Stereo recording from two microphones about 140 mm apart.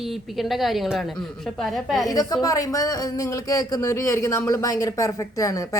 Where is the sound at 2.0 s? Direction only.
25° left (ahead or behind).